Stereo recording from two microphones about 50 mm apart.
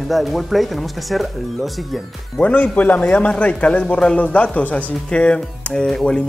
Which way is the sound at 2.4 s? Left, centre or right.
Left.